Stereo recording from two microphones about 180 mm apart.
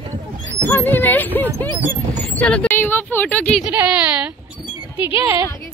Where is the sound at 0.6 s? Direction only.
10° left (ahead or behind).